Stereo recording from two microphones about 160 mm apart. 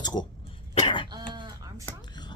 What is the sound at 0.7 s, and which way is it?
Cough, 35° left (ahead or behind).